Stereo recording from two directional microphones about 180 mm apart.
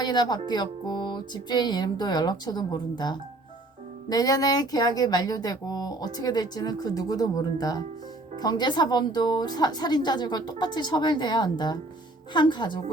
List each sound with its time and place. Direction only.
0.0 s speech: 25° left (ahead or behind)